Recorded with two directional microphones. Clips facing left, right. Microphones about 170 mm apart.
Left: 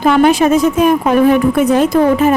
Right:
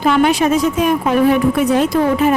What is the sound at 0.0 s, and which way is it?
A woman's voice, 45° left (ahead or behind).